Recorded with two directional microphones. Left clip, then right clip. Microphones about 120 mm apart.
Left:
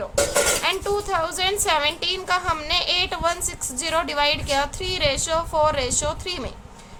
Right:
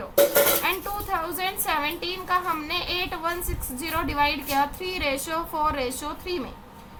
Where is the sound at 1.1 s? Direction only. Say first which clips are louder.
Left 2 dB; 35° left (ahead or behind).